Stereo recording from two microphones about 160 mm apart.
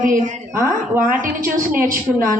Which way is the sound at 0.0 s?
55° right (ahead or behind).